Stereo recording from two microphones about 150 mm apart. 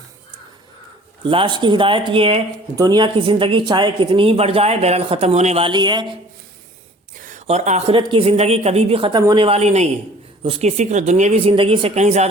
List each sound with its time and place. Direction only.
1.2 s speech: 35° right (ahead or behind)
7.2 s a sound: 60° right (ahead or behind)
7.4 s speech: 50° right (ahead or behind)
7.9 s speech: 40° right (ahead or behind)